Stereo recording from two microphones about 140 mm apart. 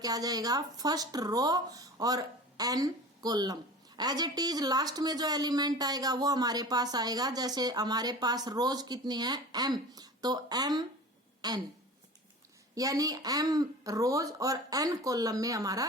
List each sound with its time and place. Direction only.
0.0 s speech: 25° right (ahead or behind)
12.7 s speech: 25° right (ahead or behind)